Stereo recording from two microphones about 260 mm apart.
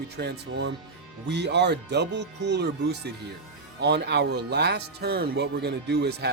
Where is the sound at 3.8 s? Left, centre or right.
Right.